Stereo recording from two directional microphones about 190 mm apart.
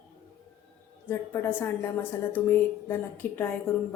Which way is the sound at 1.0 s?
10° left (ahead or behind).